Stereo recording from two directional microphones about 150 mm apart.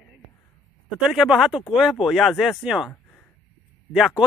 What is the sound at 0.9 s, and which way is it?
Speech, 5° right (ahead or behind).